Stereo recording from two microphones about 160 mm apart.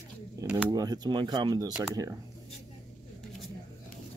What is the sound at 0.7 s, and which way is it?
Speech, 25° right (ahead or behind).